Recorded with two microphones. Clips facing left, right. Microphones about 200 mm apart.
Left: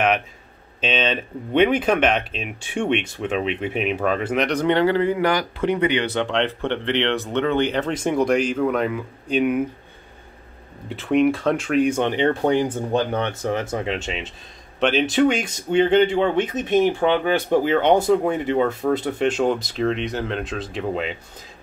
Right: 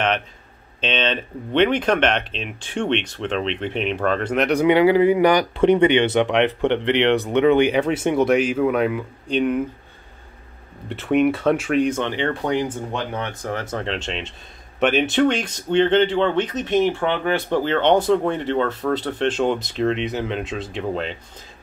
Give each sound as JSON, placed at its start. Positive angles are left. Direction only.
{"t": 0.7, "sound": "speech", "side_deg": 5}
{"t": 4.5, "sound": "speech", "side_deg": -10}
{"t": 10.9, "sound": "speech", "side_deg": 0}
{"t": 11.8, "sound": "speech", "side_deg": 15}
{"t": 12.5, "sound": "speech", "side_deg": 40}
{"t": 13.4, "sound": "speech", "side_deg": 20}